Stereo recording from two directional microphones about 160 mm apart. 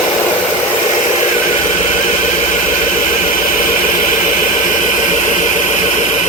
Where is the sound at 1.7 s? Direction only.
45° left (ahead or behind).